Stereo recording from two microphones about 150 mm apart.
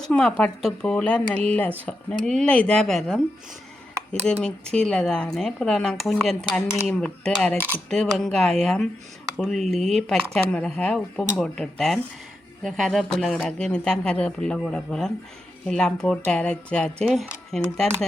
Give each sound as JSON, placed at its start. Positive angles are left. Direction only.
{"t": 0.0, "sound": "speech", "side_deg": 5}